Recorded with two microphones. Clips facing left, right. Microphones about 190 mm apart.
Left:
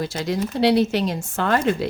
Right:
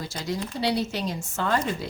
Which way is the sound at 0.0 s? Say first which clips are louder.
Left 7 dB; 70° left (ahead or behind).